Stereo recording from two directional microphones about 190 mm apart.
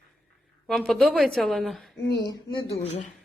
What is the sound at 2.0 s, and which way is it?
Speech, 65° left (ahead or behind).